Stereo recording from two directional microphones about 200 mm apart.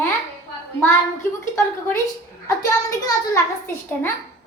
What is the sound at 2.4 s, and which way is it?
Child singing, 15° left (ahead or behind).